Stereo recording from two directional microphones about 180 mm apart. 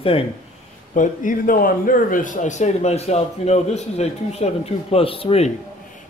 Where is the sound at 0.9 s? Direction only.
45° left (ahead or behind).